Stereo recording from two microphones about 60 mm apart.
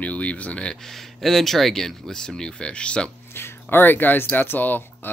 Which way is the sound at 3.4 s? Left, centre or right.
Left.